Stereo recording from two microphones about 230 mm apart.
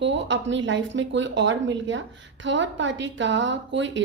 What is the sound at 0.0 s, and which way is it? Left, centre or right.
A woman's voice, right.